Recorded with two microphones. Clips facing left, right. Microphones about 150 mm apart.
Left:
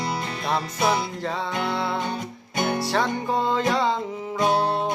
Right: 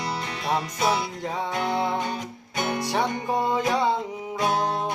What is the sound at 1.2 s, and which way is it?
Music, 15° right (ahead or behind).